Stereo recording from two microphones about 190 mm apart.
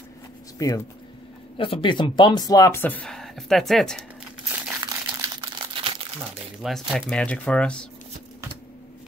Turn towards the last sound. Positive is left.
turn(degrees=5)  # may be behind; listen again after turning